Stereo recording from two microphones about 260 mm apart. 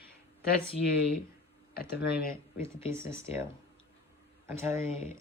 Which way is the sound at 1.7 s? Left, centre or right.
Left.